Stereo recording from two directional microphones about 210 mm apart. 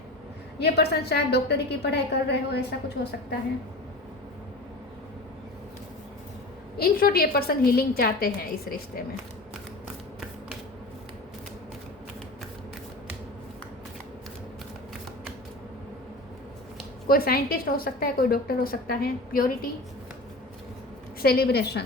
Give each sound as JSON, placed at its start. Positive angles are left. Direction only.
{"t": 0.6, "sound": "a woman's voice", "side_deg": 50}
{"t": 6.7, "sound": "a woman's voice", "side_deg": 45}
{"t": 17.1, "sound": "a woman's voice", "side_deg": 45}
{"t": 21.2, "sound": "a woman's voice", "side_deg": 45}